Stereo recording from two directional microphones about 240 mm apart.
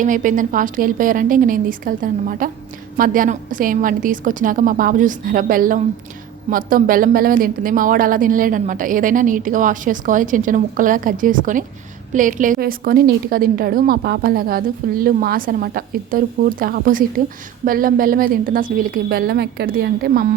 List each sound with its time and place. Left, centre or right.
0.0 s a woman's voice: right